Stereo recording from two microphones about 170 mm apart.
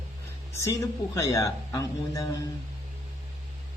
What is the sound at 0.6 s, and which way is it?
A man's voice, 20° left (ahead or behind).